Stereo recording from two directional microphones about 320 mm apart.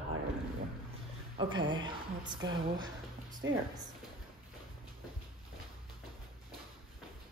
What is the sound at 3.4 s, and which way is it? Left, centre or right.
Speech, right.